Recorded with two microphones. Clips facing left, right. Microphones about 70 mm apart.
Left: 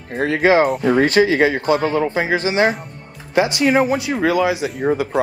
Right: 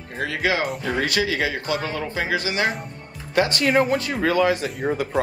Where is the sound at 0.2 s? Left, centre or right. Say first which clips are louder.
Left 9 dB; left.